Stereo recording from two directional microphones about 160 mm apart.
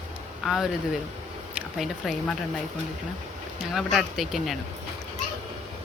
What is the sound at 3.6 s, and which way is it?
Speech, centre (ahead or behind).